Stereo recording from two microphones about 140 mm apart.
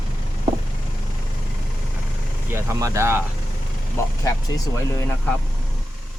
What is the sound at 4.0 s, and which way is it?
Speech, 20° left (ahead or behind).